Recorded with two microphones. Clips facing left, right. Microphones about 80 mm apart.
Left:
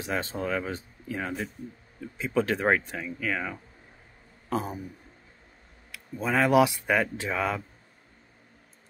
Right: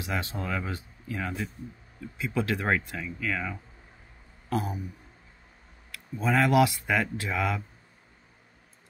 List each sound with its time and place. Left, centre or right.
0.0 s speech: left
5.9 s speech: centre